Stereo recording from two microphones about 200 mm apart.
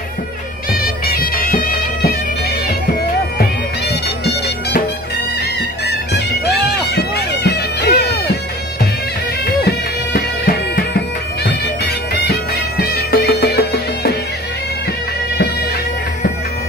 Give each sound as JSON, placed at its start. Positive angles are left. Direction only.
{"t": 0.7, "sound": "music", "side_deg": 45}
{"t": 3.3, "sound": "bagpipes", "side_deg": 55}
{"t": 5.9, "sound": "bagpipes", "side_deg": 55}
{"t": 9.6, "sound": "music", "side_deg": 50}
{"t": 11.4, "sound": "bagpipes", "side_deg": 55}